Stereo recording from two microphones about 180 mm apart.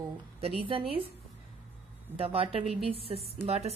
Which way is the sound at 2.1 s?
30° right (ahead or behind).